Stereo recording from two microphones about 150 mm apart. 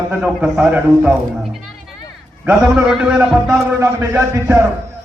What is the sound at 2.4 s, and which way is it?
A man's voice, 10° right (ahead or behind).